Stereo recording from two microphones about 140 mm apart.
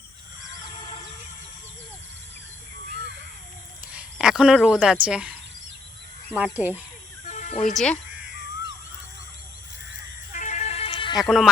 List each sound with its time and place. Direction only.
3.9 s speech: 5° right (ahead or behind)
7.3 s music: 55° left (ahead or behind)
7.7 s speech: centre (ahead or behind)
10.3 s music: 60° left (ahead or behind); by 11.2 s 35° left (ahead or behind)
11.2 s speech: centre (ahead or behind)